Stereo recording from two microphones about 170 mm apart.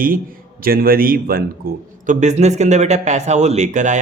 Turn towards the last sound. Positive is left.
turn(degrees=-45)  # may be behind; listen again after turning